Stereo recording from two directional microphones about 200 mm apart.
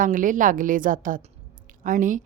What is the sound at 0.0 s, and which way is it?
A woman's voice, 40° right (ahead or behind).